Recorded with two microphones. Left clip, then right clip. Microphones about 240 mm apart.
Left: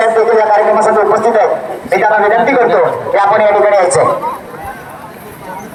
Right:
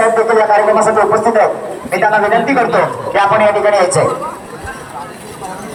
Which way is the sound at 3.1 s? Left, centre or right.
Left.